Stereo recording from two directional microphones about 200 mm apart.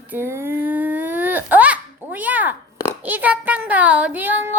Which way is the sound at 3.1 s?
10° right (ahead or behind).